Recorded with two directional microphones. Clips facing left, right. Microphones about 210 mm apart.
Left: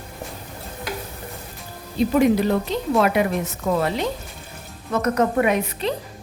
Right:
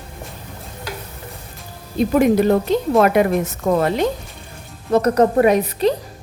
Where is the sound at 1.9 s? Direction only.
50° right (ahead or behind).